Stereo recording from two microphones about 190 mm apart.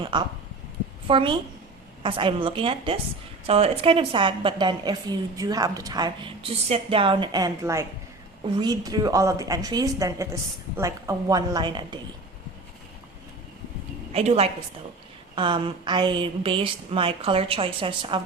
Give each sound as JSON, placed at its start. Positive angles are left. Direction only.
{"t": 0.0, "sound": "a woman's voice", "side_deg": -25}
{"t": 14.1, "sound": "a woman's voice", "side_deg": -35}